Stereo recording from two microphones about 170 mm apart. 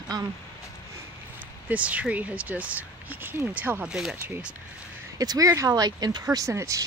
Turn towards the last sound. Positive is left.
turn(degrees=-20)  # may be behind; listen again after turning